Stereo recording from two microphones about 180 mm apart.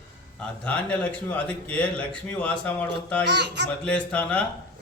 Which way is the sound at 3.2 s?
70° right (ahead or behind).